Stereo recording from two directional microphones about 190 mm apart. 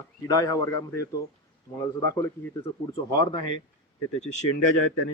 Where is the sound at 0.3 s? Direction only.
15° left (ahead or behind).